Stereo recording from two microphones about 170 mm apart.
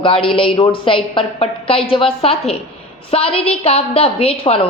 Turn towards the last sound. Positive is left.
turn(degrees=35)  # may be behind; listen again after turning